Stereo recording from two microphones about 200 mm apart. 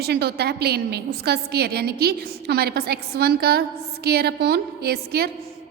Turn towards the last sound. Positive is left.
turn(degrees=-55)  # may be behind; listen again after turning